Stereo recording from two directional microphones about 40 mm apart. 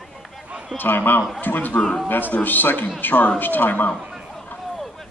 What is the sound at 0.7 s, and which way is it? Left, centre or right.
A man's voice, left.